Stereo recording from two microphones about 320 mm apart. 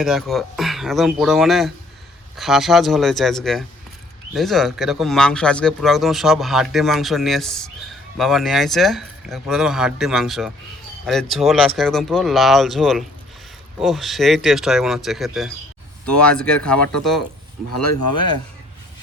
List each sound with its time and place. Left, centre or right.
0.0 s speech: centre
17.7 s speech: left